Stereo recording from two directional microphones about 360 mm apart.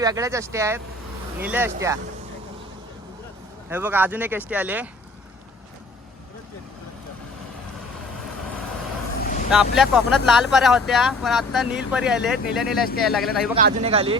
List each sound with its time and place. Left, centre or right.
0.0 s speech: centre
3.7 s speech: centre
9.5 s speech: centre
13.6 s speech: centre